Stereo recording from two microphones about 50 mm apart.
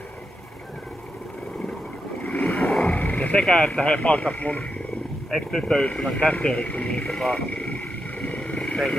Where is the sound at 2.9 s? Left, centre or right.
Left.